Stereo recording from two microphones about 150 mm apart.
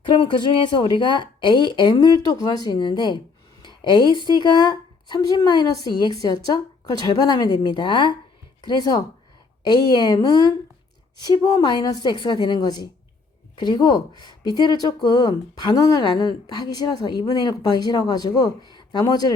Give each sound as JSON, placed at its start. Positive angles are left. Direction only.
{"t": 0.0, "sound": "a woman's voice", "side_deg": 30}